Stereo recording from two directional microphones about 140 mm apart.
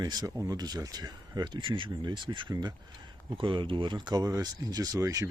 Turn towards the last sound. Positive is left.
turn(degrees=-25)  # may be behind; listen again after turning